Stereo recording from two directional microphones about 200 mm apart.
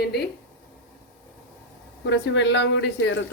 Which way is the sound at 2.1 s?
65° left (ahead or behind).